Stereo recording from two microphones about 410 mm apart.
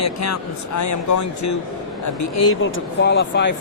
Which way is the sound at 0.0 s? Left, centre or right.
Left.